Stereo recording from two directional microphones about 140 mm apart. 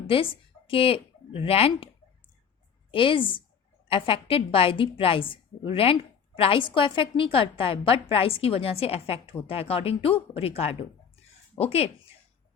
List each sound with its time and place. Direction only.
0.1 s speech: 40° left (ahead or behind)
2.9 s a woman's voice: 40° left (ahead or behind)